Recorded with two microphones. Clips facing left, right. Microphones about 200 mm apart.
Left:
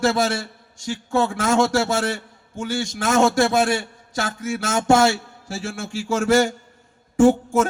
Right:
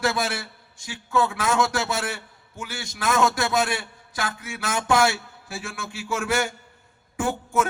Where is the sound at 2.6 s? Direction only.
45° left (ahead or behind).